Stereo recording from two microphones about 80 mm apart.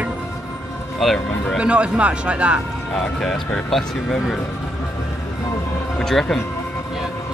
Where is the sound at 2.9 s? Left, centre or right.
Centre.